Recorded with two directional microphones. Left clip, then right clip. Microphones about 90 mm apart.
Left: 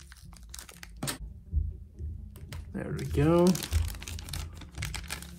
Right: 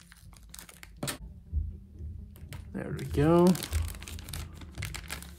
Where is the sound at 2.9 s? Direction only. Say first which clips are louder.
Right 1 dB; 20° right (ahead or behind).